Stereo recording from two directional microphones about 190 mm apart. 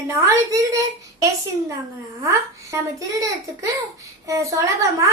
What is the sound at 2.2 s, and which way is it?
A woman's voice, 15° right (ahead or behind).